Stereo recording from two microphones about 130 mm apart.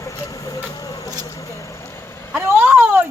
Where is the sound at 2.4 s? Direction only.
15° right (ahead or behind).